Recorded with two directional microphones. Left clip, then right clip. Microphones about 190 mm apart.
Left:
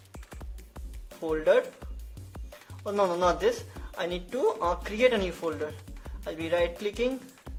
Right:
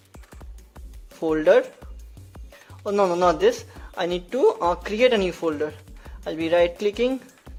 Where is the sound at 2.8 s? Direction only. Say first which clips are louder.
Right 6 dB; 35° right (ahead or behind).